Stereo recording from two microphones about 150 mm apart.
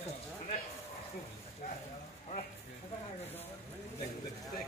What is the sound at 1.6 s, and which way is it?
Speech, 70° left (ahead or behind).